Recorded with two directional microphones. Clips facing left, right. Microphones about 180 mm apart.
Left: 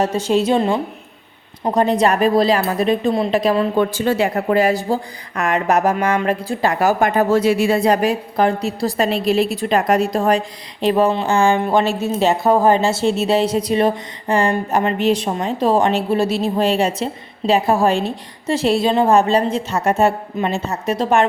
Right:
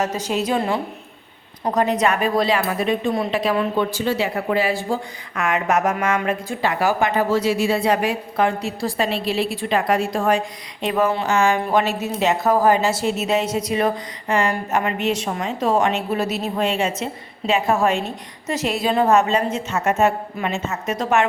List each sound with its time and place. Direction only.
0.0 s a woman's voice: 30° left (ahead or behind)
3.8 s speech: 50° left (ahead or behind); by 21.2 s 30° left (ahead or behind)